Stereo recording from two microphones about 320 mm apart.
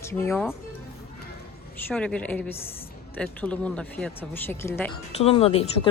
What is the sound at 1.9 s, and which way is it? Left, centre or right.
Speech, centre.